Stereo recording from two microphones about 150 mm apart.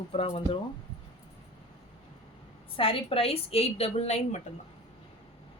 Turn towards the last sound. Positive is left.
turn(degrees=45)  # may be behind; listen again after turning